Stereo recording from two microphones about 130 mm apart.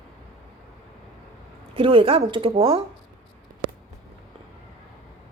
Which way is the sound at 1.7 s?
45° right (ahead or behind).